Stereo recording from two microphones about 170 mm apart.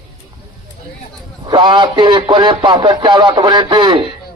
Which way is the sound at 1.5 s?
25° right (ahead or behind).